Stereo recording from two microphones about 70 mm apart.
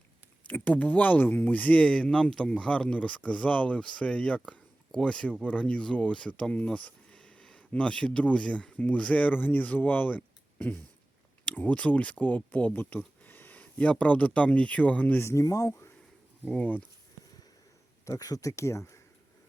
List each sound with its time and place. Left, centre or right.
0.4 s speech: left
15.2 s speech: left
16.5 s speech: left
18.0 s speech: left